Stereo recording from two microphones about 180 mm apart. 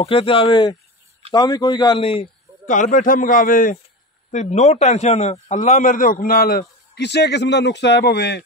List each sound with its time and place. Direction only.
0.0 s a man's voice: 30° left (ahead or behind)
2.6 s a man's voice: 45° left (ahead or behind)
7.0 s speech: 70° left (ahead or behind)